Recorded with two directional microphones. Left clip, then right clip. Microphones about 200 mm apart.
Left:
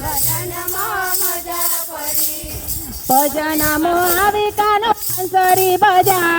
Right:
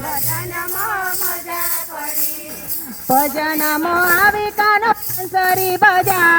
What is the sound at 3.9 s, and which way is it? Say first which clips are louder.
Music: right 5 dB; 25° left (ahead or behind).